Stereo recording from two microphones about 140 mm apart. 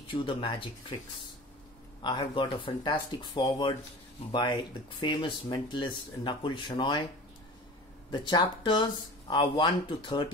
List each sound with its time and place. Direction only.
0.1 s speech: 35° left (ahead or behind)
2.0 s speech: 35° left (ahead or behind)
8.1 s speech: 30° left (ahead or behind)